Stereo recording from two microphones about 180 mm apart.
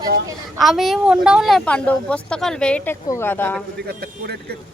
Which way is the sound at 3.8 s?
60° right (ahead or behind).